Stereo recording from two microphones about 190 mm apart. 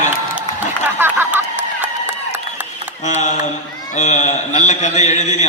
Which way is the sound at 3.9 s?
40° left (ahead or behind).